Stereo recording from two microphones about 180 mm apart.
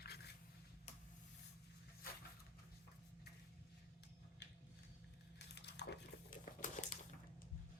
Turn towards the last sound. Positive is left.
turn(degrees=70)  # may be behind; listen again after turning